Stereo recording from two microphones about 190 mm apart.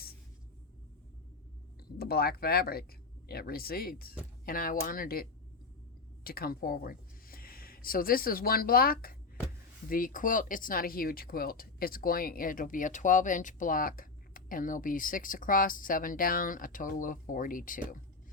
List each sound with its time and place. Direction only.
2.0 s speech: 55° left (ahead or behind)
6.2 s speech: 50° left (ahead or behind)